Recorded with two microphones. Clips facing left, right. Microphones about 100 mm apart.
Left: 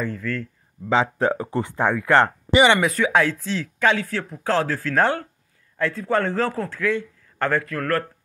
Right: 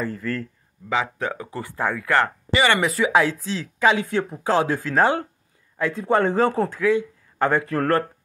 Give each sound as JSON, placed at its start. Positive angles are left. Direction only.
{"t": 0.0, "sound": "speech", "side_deg": -5}
{"t": 0.8, "sound": "speech", "side_deg": 30}
{"t": 2.8, "sound": "speech", "side_deg": 0}
{"t": 4.1, "sound": "speech", "side_deg": -20}
{"t": 7.6, "sound": "speech", "side_deg": -25}